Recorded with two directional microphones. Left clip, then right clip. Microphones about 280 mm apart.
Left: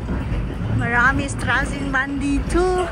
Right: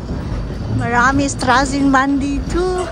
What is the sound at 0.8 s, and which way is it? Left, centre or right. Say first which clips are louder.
A woman's voice: right 3 dB; centre.